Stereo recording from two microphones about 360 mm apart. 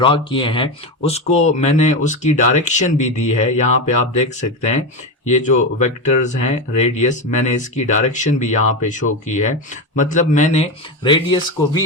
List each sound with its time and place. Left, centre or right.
0.0 s speech: centre